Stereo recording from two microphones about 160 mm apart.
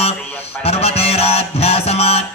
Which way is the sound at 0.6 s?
40° left (ahead or behind).